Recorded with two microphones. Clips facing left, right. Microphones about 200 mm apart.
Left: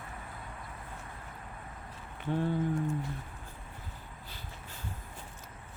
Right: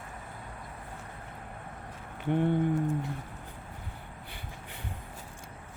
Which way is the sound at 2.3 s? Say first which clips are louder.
Right 4 dB; 20° right (ahead or behind).